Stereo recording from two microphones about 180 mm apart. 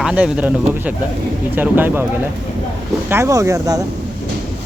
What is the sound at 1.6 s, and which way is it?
Speech, 10° right (ahead or behind).